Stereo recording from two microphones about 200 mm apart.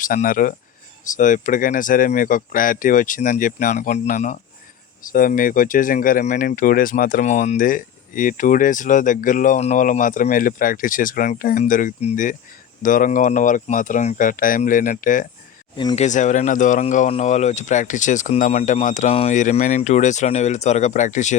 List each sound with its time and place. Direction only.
0.0 s speech: 45° left (ahead or behind)